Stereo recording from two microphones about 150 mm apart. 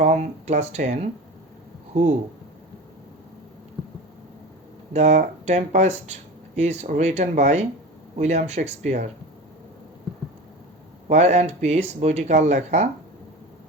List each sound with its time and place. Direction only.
0.0 s speech: 50° right (ahead or behind)
4.9 s speech: 50° right (ahead or behind)
11.1 s speech: 50° right (ahead or behind)